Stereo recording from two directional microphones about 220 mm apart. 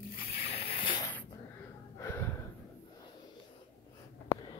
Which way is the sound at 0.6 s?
25° left (ahead or behind).